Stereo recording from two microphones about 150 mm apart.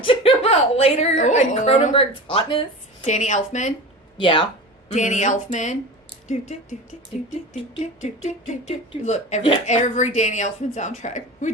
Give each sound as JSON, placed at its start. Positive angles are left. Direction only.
{"t": 0.0, "sound": "a woman's voice", "side_deg": 35}
{"t": 3.1, "sound": "speech", "side_deg": 55}
{"t": 4.2, "sound": "a woman's voice", "side_deg": 35}
{"t": 4.9, "sound": "speech", "side_deg": 55}
{"t": 8.0, "sound": "speech", "side_deg": 50}